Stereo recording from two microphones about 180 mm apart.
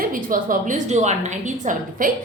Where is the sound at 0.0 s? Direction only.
50° right (ahead or behind).